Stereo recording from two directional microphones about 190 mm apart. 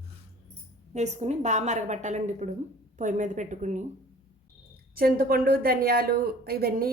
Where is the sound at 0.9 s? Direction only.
35° right (ahead or behind).